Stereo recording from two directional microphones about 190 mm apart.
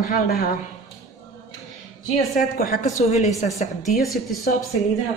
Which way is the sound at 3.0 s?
35° left (ahead or behind).